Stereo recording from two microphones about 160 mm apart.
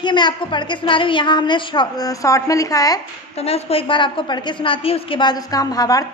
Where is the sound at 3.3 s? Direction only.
40° left (ahead or behind).